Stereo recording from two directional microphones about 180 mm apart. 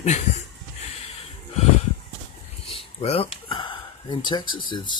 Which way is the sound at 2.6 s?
35° left (ahead or behind).